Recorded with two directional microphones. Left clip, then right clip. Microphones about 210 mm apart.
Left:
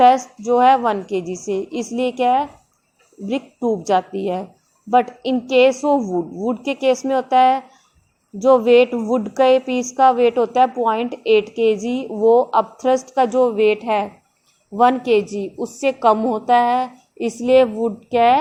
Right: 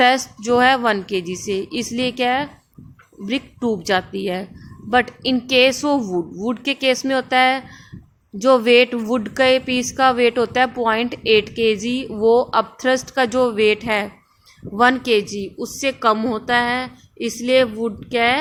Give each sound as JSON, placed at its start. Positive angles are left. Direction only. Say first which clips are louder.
{"t": 0.0, "sound": "a woman's voice", "louder": "left 3 dB", "side_deg": -15}